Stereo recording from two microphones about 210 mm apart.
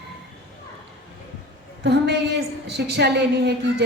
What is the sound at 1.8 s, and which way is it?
A woman's voice, 55° right (ahead or behind).